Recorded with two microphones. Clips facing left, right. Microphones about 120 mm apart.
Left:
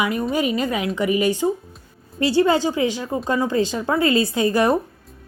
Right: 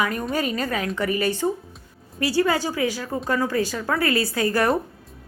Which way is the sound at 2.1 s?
25° left (ahead or behind).